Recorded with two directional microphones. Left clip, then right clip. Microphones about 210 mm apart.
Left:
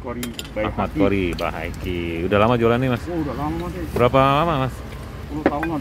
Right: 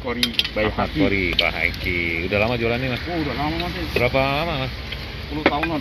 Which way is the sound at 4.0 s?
30° left (ahead or behind).